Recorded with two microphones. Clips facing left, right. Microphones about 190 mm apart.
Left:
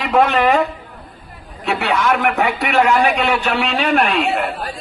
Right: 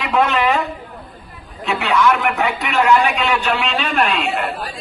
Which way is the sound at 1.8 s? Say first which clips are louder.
Right 1 dB; 50° left (ahead or behind).